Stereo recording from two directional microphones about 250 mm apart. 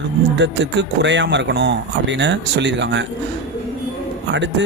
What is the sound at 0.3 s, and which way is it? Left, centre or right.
Speech, right.